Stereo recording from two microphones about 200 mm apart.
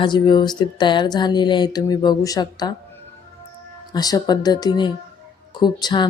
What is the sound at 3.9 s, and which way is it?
Speech, 20° left (ahead or behind).